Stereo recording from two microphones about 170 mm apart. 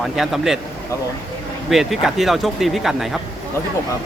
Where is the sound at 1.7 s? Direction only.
Centre (ahead or behind).